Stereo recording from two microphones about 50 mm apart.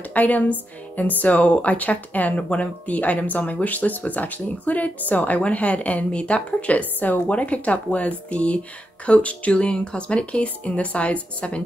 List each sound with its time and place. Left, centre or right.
0.1 s speech: left